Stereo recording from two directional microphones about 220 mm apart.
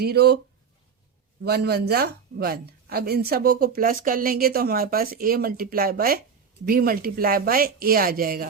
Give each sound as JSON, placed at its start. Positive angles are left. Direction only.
{"t": 0.0, "sound": "speech", "side_deg": -45}
{"t": 1.4, "sound": "speech", "side_deg": -45}